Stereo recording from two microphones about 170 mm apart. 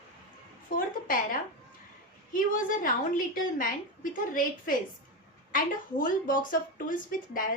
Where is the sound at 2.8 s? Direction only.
55° left (ahead or behind).